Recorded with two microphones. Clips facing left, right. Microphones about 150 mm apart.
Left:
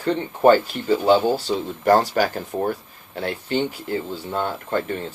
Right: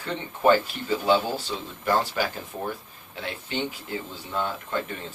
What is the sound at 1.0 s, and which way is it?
Speech, 35° left (ahead or behind).